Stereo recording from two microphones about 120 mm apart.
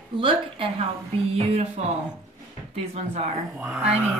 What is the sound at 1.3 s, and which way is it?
Speech, 60° right (ahead or behind).